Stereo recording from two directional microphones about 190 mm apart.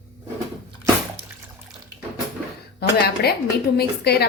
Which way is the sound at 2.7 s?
55° left (ahead or behind).